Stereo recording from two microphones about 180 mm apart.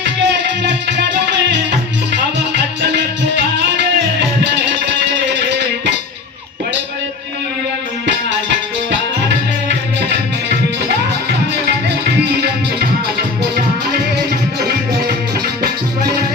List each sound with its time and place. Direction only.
0.7 s music: 70° right (ahead or behind)
2.8 s music: 75° right (ahead or behind)
5.2 s music: 75° right (ahead or behind)